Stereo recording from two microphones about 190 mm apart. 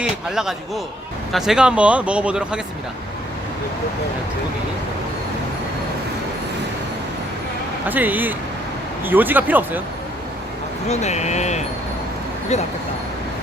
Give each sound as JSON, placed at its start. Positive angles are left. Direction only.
{"t": 0.0, "sound": "speech", "side_deg": -5}
{"t": 7.9, "sound": "speech", "side_deg": -10}
{"t": 10.8, "sound": "speech", "side_deg": 35}